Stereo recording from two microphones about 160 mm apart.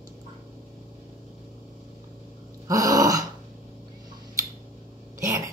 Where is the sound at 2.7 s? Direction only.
20° right (ahead or behind).